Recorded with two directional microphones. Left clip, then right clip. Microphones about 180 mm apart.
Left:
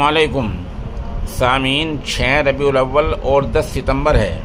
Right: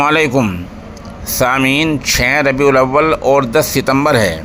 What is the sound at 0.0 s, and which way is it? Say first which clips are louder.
Speech: right 3 dB; 25° right (ahead or behind).